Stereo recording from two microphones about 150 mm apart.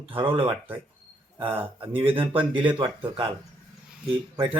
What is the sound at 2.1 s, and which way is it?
Speech, 35° right (ahead or behind).